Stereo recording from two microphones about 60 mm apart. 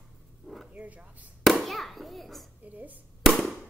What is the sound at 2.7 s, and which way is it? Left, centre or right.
Speech, right.